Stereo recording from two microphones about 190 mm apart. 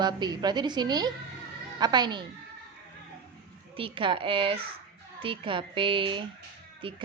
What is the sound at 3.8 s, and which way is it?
A woman's voice, 25° right (ahead or behind).